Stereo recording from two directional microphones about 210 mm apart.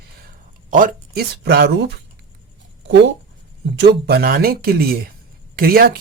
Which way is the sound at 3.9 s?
50° right (ahead or behind).